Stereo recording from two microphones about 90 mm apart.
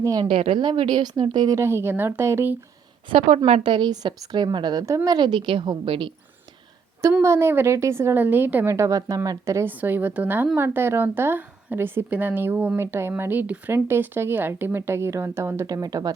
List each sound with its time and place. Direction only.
0.0 s a woman's voice: 45° right (ahead or behind)
0.3 s speech: 90° right; by 1.5 s 55° right (ahead or behind)
1.5 s speech: 30° right (ahead or behind)
3.1 s a woman's voice: 65° right (ahead or behind); by 4.9 s 45° right (ahead or behind)
5.0 s speech: 55° right (ahead or behind)
7.2 s speech: 30° right (ahead or behind)
8.7 s a woman's voice: 35° right (ahead or behind)
9.6 s speech: 20° right (ahead or behind)
15.6 s a woman's voice: 45° right (ahead or behind)